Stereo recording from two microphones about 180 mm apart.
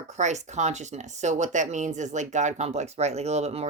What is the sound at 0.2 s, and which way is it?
Speech, 40° right (ahead or behind).